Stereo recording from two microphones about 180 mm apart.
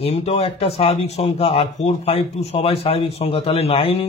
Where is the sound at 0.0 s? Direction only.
35° left (ahead or behind).